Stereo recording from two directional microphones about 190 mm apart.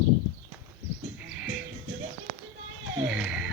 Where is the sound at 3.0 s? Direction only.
5° right (ahead or behind).